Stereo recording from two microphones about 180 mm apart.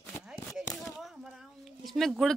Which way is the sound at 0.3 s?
Centre (ahead or behind).